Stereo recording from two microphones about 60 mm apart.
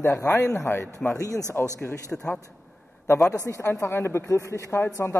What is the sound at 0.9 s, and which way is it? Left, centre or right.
Speech, left.